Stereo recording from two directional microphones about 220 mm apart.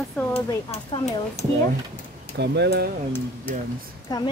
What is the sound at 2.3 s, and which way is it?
Speech, 50° right (ahead or behind).